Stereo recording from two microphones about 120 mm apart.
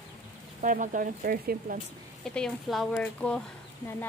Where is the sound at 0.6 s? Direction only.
90° right.